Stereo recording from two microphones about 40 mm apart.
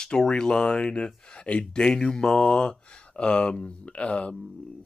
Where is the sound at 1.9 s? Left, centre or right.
Centre.